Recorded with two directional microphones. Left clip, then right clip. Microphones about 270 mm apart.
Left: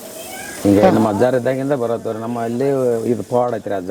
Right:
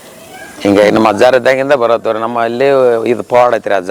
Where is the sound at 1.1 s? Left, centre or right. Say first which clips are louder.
Right 8 dB; centre.